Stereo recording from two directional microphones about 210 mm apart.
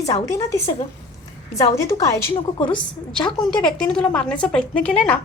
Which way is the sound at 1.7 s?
15° left (ahead or behind).